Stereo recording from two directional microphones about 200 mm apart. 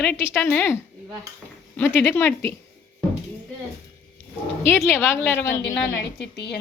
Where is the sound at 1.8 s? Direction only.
10° left (ahead or behind).